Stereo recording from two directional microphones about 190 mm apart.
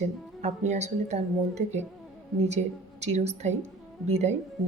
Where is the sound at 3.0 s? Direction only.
35° right (ahead or behind).